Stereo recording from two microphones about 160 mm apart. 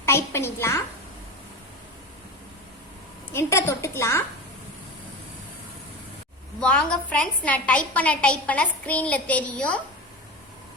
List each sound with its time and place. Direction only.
0.0 s a sound: 15° left (ahead or behind)
3.3 s a woman's voice: 15° left (ahead or behind)
6.6 s a woman's voice: 5° left (ahead or behind)